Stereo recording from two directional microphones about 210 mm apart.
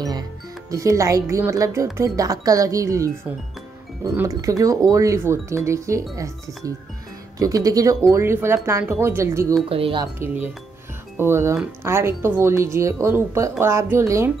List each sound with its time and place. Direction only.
0.7 s speech: 15° right (ahead or behind)
9.7 s speech: 25° right (ahead or behind)
10.1 s speech: 10° right (ahead or behind)